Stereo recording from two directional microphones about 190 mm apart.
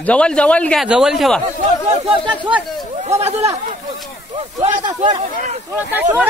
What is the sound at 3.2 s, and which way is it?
Speech, 35° right (ahead or behind).